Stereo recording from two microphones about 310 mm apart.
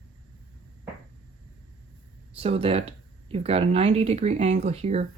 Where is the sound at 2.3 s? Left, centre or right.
Centre.